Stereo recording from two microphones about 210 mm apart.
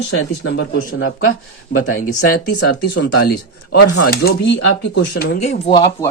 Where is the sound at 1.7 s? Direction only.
40° left (ahead or behind).